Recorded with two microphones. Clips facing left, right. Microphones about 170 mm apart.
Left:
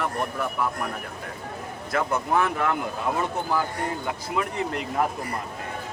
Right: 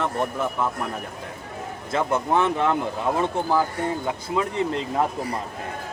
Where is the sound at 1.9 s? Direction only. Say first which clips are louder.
Right 2 dB; 25° right (ahead or behind).